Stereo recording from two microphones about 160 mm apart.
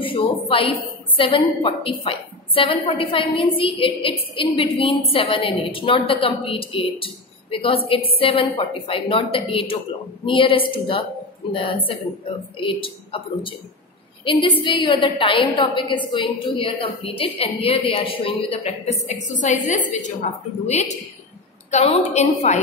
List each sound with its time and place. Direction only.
0.0 s a woman's voice: 35° left (ahead or behind)